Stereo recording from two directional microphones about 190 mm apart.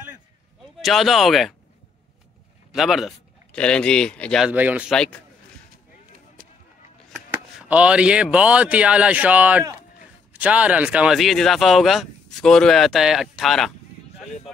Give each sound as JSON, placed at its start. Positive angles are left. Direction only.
{"t": 0.7, "sound": "speech", "side_deg": 0}
{"t": 2.7, "sound": "speech", "side_deg": 0}
{"t": 6.4, "sound": "a sound", "side_deg": -50}
{"t": 7.6, "sound": "speech", "side_deg": -5}